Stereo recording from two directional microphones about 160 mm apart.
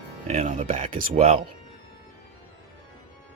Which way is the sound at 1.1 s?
40° right (ahead or behind).